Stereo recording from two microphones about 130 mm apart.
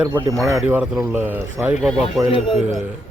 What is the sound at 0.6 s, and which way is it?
Speech, 10° right (ahead or behind).